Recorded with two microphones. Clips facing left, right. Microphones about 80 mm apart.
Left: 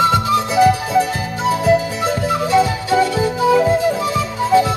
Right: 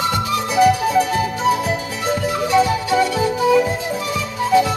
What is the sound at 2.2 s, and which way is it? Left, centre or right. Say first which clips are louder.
Music: left 1 dB; left.